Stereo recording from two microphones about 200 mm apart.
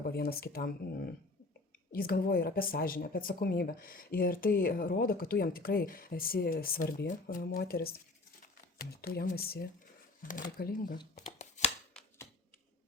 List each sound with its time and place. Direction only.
0.0 s speech: 50° left (ahead or behind)
1.9 s speech: 45° left (ahead or behind)